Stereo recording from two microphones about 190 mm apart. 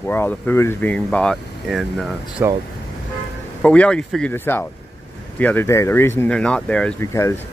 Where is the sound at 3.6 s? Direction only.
5° left (ahead or behind).